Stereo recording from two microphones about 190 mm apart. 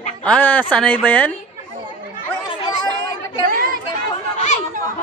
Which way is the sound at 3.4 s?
50° right (ahead or behind).